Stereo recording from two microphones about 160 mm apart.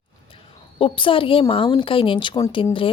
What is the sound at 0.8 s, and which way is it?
A woman's voice, 35° left (ahead or behind).